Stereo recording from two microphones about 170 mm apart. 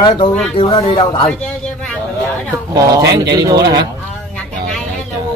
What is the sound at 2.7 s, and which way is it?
Speech, 20° right (ahead or behind).